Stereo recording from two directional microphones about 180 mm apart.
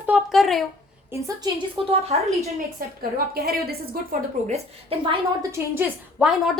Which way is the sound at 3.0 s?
55° right (ahead or behind).